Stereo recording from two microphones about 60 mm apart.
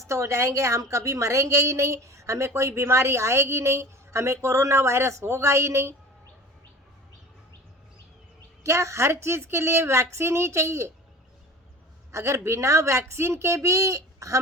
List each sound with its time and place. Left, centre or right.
0.0 s a woman's voice: right
8.6 s a woman's voice: right
12.1 s a woman's voice: right